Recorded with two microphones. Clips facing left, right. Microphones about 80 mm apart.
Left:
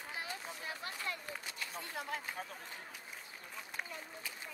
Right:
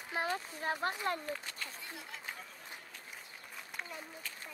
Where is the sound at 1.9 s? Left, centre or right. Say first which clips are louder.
Left 5 dB; left.